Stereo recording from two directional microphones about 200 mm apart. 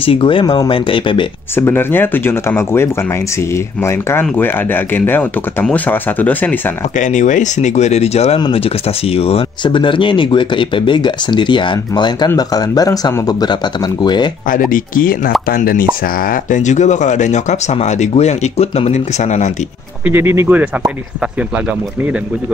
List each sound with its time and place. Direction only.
0.0 s speech: 25° left (ahead or behind)
1.6 s speech: 10° left (ahead or behind)
7.0 s speech: 40° left (ahead or behind); by 14.3 s 20° left (ahead or behind)
14.5 s speech: 45° left (ahead or behind)
20.1 s speech: 10° right (ahead or behind)